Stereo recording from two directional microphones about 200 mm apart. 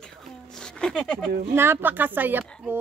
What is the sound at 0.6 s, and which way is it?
Speech, 5° left (ahead or behind).